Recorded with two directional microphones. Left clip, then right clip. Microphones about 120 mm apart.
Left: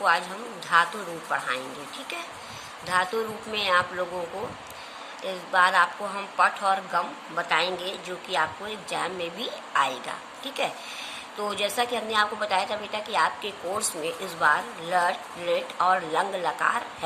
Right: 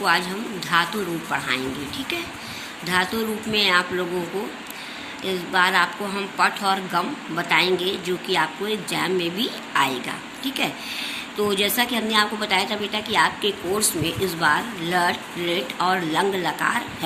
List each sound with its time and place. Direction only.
0.0 s a woman's voice: 40° left (ahead or behind)
2.8 s a woman's voice: 45° left (ahead or behind)
5.2 s a woman's voice: 45° left (ahead or behind)